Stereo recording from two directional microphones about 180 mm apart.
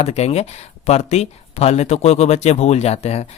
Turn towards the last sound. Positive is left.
turn(degrees=35)  # may be behind; listen again after turning